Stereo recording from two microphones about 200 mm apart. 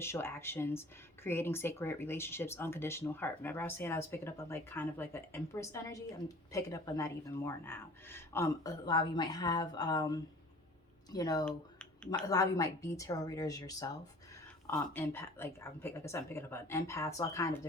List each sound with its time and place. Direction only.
0.0 s speech: 10° left (ahead or behind)
11.4 s a sound: 5° left (ahead or behind)
12.3 s speech: 15° left (ahead or behind)